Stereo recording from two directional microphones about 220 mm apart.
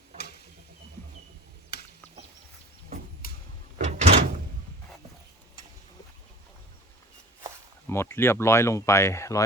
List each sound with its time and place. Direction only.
0.2 s a sound: 45° left (ahead or behind)
3.8 s door: 30° right (ahead or behind)
7.9 s speech: 10° left (ahead or behind)